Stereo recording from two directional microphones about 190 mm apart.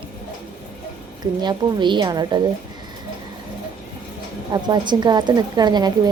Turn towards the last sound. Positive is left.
turn(degrees=-20)  # may be behind; listen again after turning